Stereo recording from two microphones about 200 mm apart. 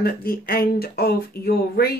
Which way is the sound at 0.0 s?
50° left (ahead or behind).